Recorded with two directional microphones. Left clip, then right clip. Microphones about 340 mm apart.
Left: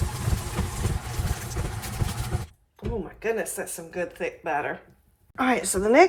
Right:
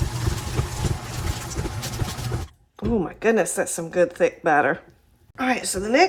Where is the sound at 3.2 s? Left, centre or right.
Centre.